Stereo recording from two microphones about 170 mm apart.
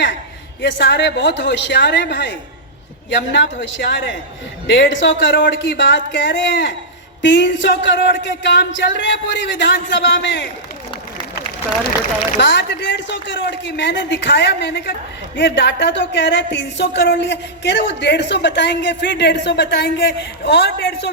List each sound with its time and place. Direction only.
0.6 s speech: 85° left
3.3 s speech: 90° left
12.4 s speech: 90° left
15.4 s speech: 90° left